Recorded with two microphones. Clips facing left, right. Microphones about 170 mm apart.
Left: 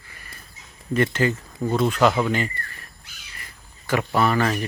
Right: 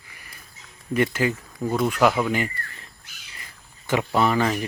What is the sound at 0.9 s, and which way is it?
Speech, 10° right (ahead or behind).